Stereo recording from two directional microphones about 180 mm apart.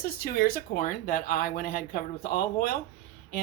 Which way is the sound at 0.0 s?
55° left (ahead or behind).